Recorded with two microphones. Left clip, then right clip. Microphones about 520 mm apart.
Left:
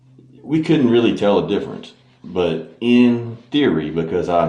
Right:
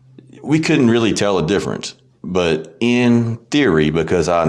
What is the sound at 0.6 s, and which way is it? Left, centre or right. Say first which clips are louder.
Speech: left 1 dB; right.